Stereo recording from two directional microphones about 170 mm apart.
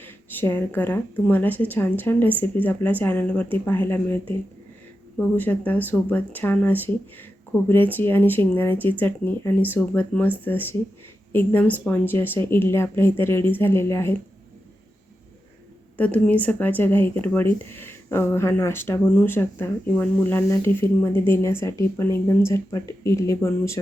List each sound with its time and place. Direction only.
0.0 s speech: 10° left (ahead or behind)
16.0 s speech: 10° left (ahead or behind)